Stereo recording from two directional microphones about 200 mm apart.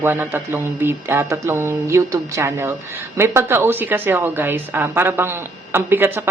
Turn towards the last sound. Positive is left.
turn(degrees=-10)  # may be behind; listen again after turning